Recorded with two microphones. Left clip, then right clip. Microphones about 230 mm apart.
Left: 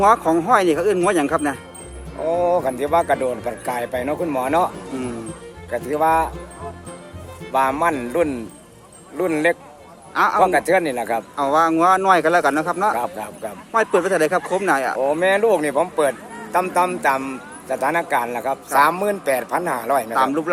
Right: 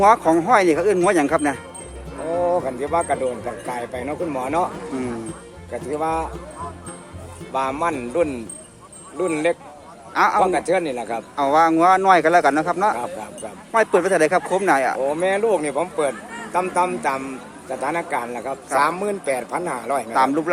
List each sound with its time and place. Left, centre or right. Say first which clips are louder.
0.0 s speech: right 1 dB; centre
2.3 s speech: left 2 dB; left
5.7 s speech: left 6 dB; left
7.5 s speech: left 4 dB; left
10.2 s speech: even; centre
10.4 s speech: left 3 dB; left
11.3 s speech: right 1 dB; centre
13.0 s speech: left 3 dB; left
13.7 s speech: right 1 dB; centre
15.0 s speech: left 3 dB; left
20.1 s speech: even; centre